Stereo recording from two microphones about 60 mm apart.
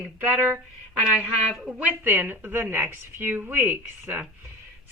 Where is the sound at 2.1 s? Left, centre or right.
Right.